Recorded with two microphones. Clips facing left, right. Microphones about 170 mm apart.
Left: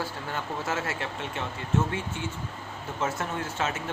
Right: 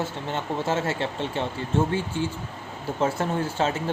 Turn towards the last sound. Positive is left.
turn(degrees=-30)  # may be behind; listen again after turning